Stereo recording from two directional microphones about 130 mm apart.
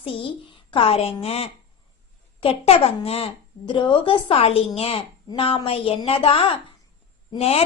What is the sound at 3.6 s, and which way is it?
A woman's voice, 35° left (ahead or behind).